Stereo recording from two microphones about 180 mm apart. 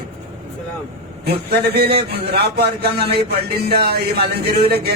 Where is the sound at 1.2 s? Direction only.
60° right (ahead or behind).